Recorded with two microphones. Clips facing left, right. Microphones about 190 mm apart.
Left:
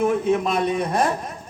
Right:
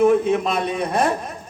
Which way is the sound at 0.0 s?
60° right (ahead or behind).